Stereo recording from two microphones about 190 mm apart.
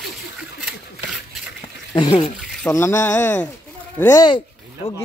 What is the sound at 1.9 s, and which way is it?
Speech, 20° left (ahead or behind).